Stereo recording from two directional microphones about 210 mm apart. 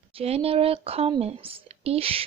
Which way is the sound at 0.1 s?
30° right (ahead or behind).